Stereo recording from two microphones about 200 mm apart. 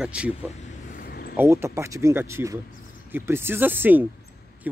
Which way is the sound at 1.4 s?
15° right (ahead or behind).